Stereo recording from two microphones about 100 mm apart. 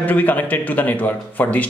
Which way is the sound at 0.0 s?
15° left (ahead or behind).